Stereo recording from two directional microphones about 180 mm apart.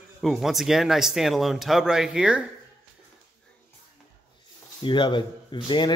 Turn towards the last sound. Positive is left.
turn(degrees=25)  # may be behind; listen again after turning